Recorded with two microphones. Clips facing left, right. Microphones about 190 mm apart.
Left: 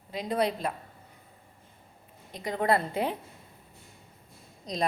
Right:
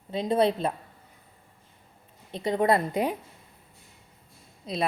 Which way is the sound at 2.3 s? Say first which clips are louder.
Right 3 dB; 25° right (ahead or behind).